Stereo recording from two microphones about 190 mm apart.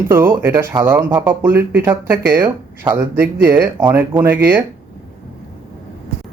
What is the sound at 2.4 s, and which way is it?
Speech, 20° right (ahead or behind).